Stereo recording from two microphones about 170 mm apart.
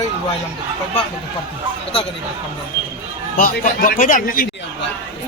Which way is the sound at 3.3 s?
55° left (ahead or behind).